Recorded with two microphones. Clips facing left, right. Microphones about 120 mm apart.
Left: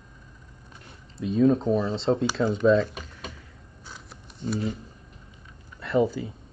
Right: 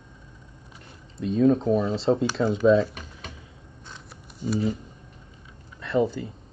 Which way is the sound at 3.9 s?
Centre (ahead or behind).